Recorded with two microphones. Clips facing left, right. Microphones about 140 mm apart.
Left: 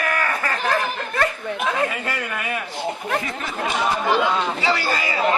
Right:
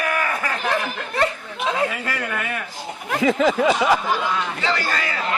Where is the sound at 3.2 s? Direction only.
90° right.